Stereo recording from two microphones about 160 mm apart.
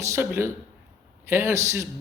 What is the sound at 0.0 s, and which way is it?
Speech, 15° right (ahead or behind).